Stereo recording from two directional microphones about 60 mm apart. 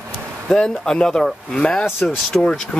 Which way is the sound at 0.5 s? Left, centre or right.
Centre.